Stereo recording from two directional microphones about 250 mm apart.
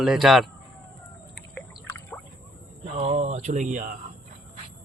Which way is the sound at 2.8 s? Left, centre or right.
Right.